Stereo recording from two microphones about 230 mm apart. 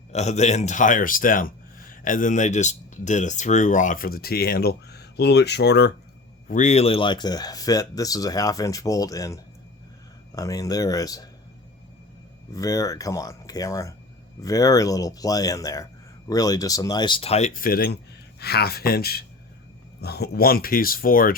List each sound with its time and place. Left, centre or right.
0.1 s speech: left
6.5 s speech: left; by 11.3 s centre
12.5 s speech: centre; by 21.3 s left